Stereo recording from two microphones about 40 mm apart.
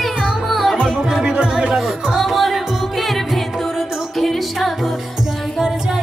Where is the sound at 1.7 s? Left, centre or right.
Centre.